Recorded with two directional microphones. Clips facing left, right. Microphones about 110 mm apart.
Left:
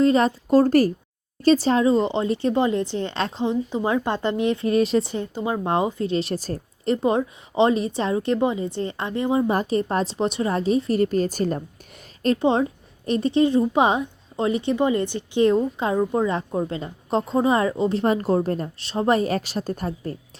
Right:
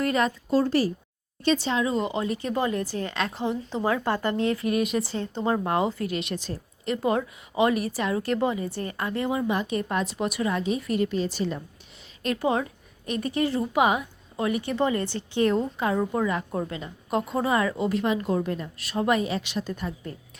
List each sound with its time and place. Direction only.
0.0 s a woman's voice: 30° left (ahead or behind)
0.5 s speech: 50° left (ahead or behind); by 5.3 s 20° left (ahead or behind)
5.3 s speech: 10° left (ahead or behind)
5.6 s a woman's voice: 20° left (ahead or behind); by 7.0 s 40° left (ahead or behind)
7.0 s speech: 25° left (ahead or behind)
9.5 s a woman's voice: 35° left (ahead or behind)
12.2 s speech: 30° left (ahead or behind)
18.0 s a woman's voice: 40° left (ahead or behind)
18.8 s a woman's voice: 30° left (ahead or behind)